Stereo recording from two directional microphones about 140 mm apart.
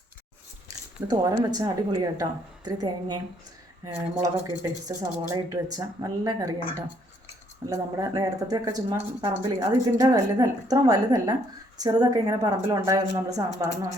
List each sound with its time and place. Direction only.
1.0 s speech: 25° right (ahead or behind)
4.2 s speech: 25° right (ahead or behind)